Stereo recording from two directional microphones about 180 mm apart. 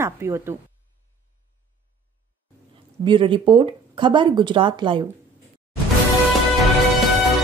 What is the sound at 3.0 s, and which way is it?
Speech, 30° right (ahead or behind).